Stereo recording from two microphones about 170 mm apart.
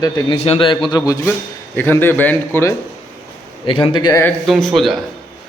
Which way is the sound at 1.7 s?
10° left (ahead or behind).